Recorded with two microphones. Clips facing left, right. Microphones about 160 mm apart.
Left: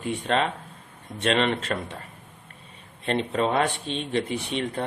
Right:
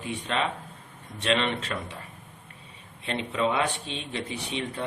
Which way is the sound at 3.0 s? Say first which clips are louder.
Left 3 dB; 45° left (ahead or behind).